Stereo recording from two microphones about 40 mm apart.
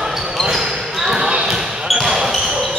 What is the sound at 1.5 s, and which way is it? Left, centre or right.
Basketball bounce, centre.